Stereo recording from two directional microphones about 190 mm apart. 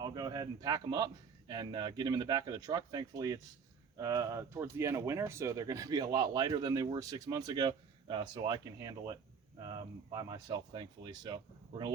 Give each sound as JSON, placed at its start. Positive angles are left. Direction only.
{"t": 0.0, "sound": "speech", "side_deg": -20}
{"t": 10.2, "sound": "speech", "side_deg": -20}